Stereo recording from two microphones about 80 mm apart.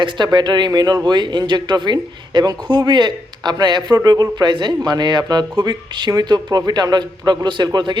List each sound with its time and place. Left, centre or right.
0.0 s speech: right
2.6 s speech: right